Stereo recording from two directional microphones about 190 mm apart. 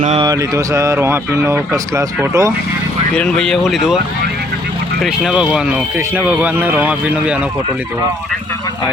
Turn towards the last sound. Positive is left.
turn(degrees=-5)  # may be behind; listen again after turning